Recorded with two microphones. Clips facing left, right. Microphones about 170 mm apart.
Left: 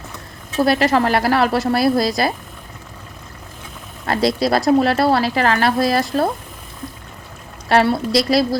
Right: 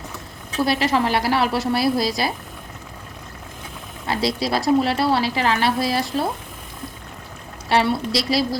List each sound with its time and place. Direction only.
0.6 s a woman's voice: 45° left (ahead or behind)
4.0 s a woman's voice: 50° left (ahead or behind)
7.7 s a woman's voice: 50° left (ahead or behind)